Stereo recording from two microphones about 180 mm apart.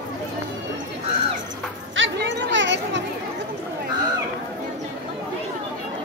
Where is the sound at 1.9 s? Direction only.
90° right.